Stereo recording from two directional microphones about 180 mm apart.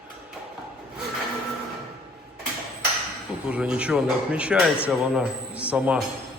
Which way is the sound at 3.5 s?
5° right (ahead or behind).